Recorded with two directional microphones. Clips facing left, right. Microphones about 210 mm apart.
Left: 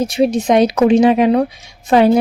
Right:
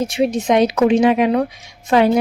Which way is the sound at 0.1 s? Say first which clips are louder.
Left 3 dB; 35° left (ahead or behind).